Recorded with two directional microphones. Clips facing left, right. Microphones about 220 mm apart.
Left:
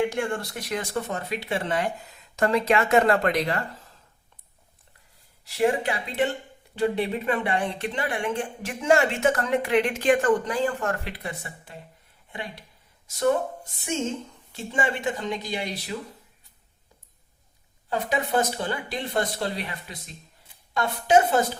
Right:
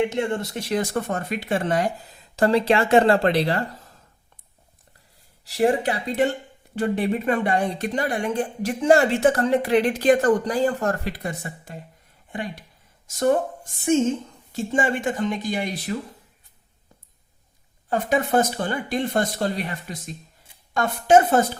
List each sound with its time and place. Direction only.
0.0 s speech: 25° right (ahead or behind)
0.8 s speech: 50° right (ahead or behind); by 3.7 s 30° right (ahead or behind)
5.5 s speech: 35° right (ahead or behind)
6.7 s speech: 45° right (ahead or behind)
14.5 s speech: 45° right (ahead or behind)
17.8 s speech: 50° right (ahead or behind)